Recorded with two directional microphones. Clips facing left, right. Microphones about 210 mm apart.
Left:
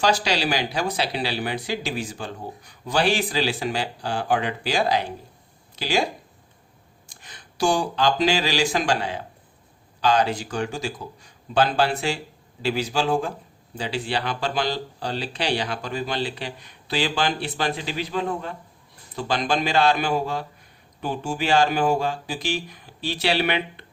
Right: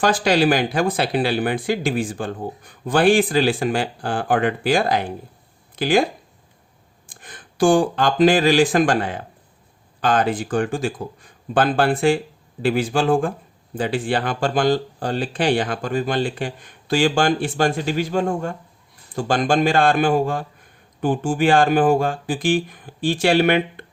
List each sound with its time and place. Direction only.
0.0 s speech: 50° right (ahead or behind)
7.1 s speech: 50° right (ahead or behind)